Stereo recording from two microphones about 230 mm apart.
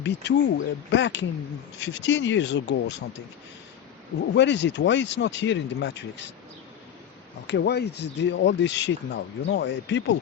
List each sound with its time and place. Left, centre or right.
0.0 s speech: left
4.4 s speech: left
7.4 s speech: left